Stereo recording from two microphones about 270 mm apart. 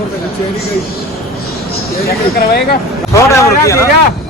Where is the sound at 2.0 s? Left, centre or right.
Left.